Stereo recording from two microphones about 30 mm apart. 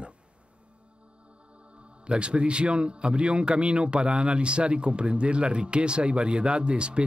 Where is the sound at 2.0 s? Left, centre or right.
Right.